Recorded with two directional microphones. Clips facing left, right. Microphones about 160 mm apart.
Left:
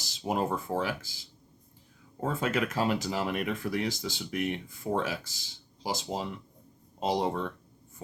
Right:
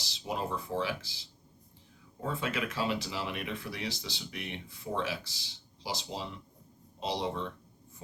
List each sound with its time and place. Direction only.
0.0 s speech: 45° left (ahead or behind)